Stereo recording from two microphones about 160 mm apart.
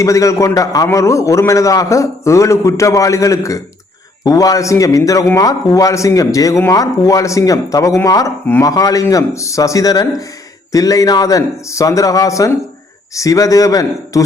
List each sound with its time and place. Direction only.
0.0 s speech: 20° left (ahead or behind)